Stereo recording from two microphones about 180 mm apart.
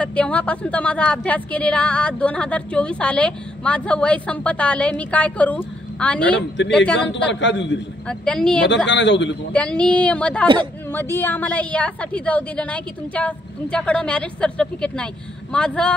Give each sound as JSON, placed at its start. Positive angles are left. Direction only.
{"t": 0.0, "sound": "a woman's voice", "side_deg": 5}
{"t": 7.0, "sound": "a man's voice", "side_deg": 85}
{"t": 8.1, "sound": "speech", "side_deg": 5}
{"t": 8.8, "sound": "a man's voice", "side_deg": 90}
{"t": 9.5, "sound": "a woman's voice", "side_deg": 5}